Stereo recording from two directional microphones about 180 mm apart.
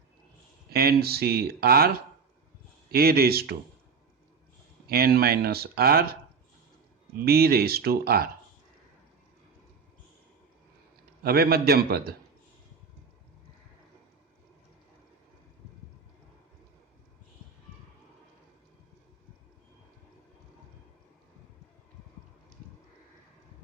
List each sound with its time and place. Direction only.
0.7 s speech: 60° right (ahead or behind)
2.9 s speech: 60° right (ahead or behind)
4.9 s speech: 55° right (ahead or behind)
7.3 s speech: 60° right (ahead or behind)
11.2 s speech: 60° right (ahead or behind)